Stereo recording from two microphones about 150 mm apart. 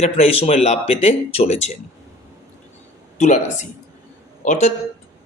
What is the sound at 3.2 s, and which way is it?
A man's voice, 50° left (ahead or behind).